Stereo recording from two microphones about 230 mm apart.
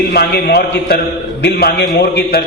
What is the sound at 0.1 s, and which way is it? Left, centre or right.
A man's voice, left.